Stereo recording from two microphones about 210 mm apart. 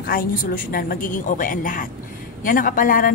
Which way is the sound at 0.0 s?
45° left (ahead or behind).